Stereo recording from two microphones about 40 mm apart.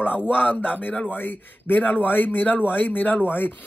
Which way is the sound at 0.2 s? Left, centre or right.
Left.